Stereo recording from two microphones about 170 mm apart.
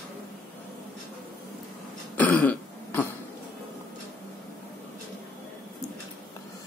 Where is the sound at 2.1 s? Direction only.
10° left (ahead or behind).